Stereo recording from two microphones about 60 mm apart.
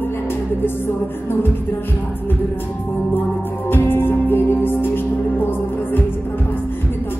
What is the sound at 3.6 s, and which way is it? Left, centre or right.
Music, left.